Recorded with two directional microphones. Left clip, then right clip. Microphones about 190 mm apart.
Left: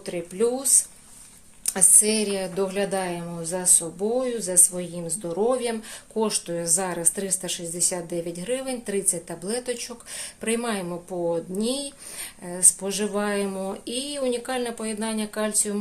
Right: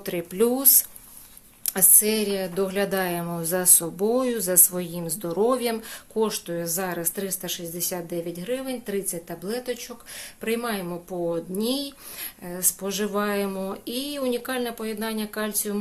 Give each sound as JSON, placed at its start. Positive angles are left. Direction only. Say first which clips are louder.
{"t": 0.0, "sound": "a woman's voice", "louder": "right 1 dB", "side_deg": -30}
{"t": 1.6, "sound": "a woman's voice", "louder": "left 2 dB", "side_deg": -15}
{"t": 6.1, "sound": "speech", "louder": "even", "side_deg": -5}